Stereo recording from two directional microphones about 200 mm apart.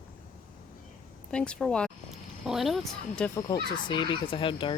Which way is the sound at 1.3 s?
5° left (ahead or behind).